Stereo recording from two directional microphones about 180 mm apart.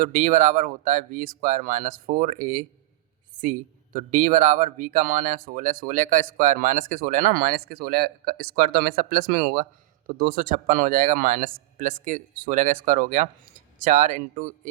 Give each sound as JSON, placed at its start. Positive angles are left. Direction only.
{"t": 0.0, "sound": "speech", "side_deg": -45}